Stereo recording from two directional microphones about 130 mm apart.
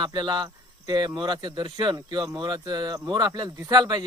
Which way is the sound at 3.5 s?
25° right (ahead or behind).